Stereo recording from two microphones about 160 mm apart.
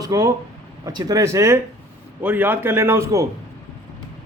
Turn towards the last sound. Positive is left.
turn(degrees=-20)  # may be behind; listen again after turning